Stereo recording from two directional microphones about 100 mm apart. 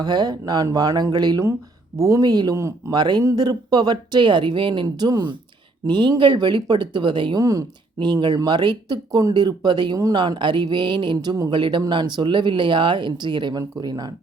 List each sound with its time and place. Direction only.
0.0 s speech: 45° right (ahead or behind)
2.6 s speech: 30° right (ahead or behind)
2.9 s speech: 45° right (ahead or behind)
7.3 s speech: 35° right (ahead or behind)
7.9 s speech: 50° right (ahead or behind)
11.5 s speech: 55° right (ahead or behind)